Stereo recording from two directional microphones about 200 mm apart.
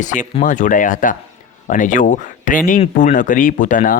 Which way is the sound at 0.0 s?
40° left (ahead or behind).